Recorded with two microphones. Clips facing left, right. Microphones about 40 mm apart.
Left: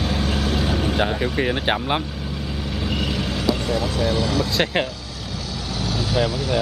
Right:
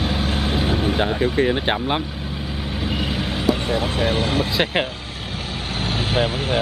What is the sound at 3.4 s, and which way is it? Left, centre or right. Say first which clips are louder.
Speech: right 2 dB; right.